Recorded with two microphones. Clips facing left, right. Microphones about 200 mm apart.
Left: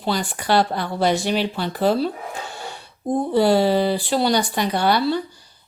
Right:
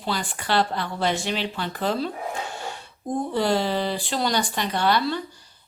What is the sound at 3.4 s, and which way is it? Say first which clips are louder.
Speech: left 7 dB; 10° left (ahead or behind).